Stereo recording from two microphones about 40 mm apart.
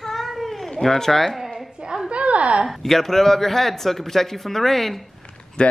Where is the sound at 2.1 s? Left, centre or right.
Right.